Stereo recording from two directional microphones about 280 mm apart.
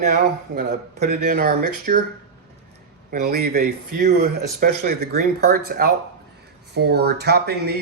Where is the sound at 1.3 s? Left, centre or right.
Right.